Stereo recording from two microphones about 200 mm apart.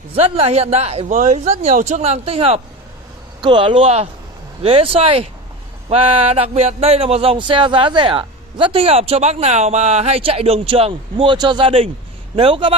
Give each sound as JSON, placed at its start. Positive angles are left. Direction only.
{"t": 0.1, "sound": "speech", "side_deg": -30}